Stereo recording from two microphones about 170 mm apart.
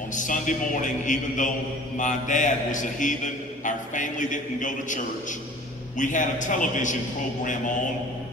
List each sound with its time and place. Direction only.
0.1 s a man's voice: 50° left (ahead or behind)